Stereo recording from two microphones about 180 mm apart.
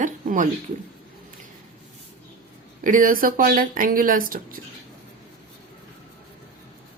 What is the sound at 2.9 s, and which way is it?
Speech, 50° right (ahead or behind).